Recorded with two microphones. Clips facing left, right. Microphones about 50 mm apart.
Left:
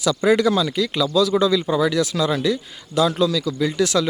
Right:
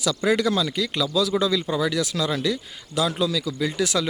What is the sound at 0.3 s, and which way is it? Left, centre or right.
A man's voice, centre.